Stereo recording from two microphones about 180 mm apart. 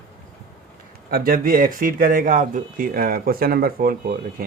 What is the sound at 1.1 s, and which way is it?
Speech, 55° right (ahead or behind).